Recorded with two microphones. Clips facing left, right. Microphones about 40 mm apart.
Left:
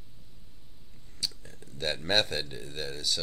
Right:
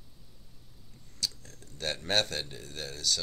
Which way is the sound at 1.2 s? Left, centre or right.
Left.